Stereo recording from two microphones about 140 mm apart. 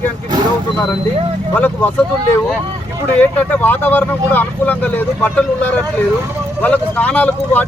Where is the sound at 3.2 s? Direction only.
10° left (ahead or behind).